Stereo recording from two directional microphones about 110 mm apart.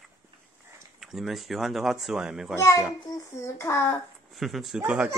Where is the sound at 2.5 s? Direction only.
30° left (ahead or behind).